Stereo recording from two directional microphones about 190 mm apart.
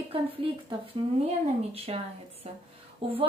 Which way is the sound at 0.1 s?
30° right (ahead or behind).